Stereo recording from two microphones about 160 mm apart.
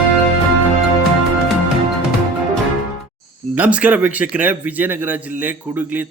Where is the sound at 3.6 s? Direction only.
10° right (ahead or behind).